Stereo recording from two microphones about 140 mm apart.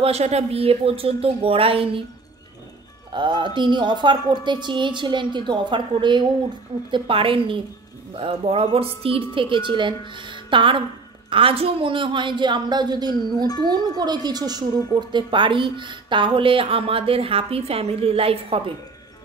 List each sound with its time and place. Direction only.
0.0 s speech: 50° right (ahead or behind)
3.1 s speech: 35° right (ahead or behind)